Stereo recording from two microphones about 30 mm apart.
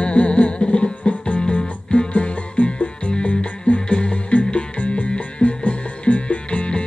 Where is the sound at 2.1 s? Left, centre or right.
Left.